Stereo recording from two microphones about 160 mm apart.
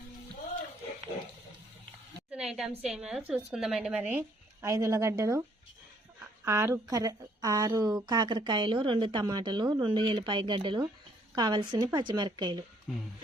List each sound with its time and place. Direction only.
2.5 s a woman's voice: 5° right (ahead or behind); by 12.6 s 25° right (ahead or behind)